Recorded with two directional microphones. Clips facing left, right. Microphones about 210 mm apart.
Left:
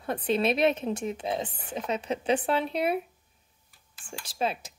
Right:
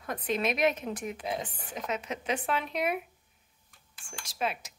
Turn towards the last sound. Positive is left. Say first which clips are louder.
# left 3 dB
turn(degrees=30)  # may be behind; listen again after turning